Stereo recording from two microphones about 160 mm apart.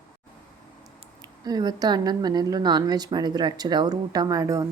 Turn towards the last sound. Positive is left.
turn(degrees=-20)  # may be behind; listen again after turning